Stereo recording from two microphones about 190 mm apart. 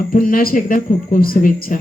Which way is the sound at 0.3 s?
45° left (ahead or behind).